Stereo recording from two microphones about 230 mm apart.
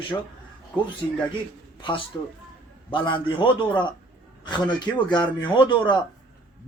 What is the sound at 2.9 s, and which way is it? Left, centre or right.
Speech, left.